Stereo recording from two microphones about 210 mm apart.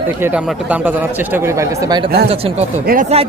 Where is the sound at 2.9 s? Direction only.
45° right (ahead or behind).